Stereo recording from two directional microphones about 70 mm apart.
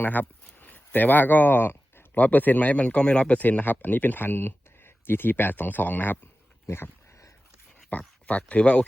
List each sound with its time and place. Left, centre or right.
0.0 s speech: left
6.7 s dog: left
7.9 s speech: left